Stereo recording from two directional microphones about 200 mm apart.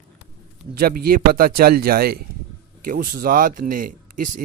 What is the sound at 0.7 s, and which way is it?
Speech, 50° right (ahead or behind).